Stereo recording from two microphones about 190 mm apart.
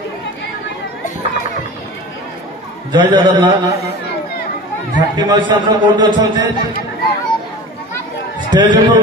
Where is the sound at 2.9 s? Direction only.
25° right (ahead or behind).